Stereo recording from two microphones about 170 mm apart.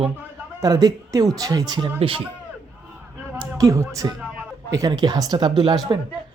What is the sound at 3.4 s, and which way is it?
Speech, 20° right (ahead or behind).